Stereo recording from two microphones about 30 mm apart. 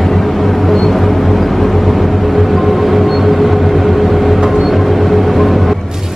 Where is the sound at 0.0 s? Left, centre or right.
Centre.